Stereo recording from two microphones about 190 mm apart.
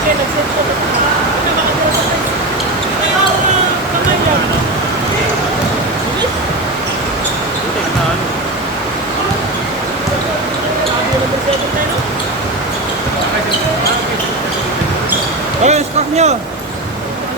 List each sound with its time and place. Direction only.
15.6 s speech: 35° right (ahead or behind)